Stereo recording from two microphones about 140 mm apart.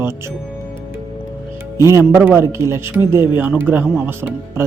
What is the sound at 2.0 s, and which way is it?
Speech, 15° right (ahead or behind).